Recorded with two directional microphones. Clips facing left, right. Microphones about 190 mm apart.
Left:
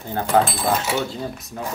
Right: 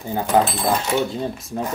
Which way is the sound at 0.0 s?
10° right (ahead or behind).